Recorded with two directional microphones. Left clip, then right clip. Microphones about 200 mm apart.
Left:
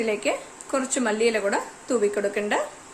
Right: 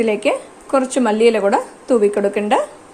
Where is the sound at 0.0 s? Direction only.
30° right (ahead or behind).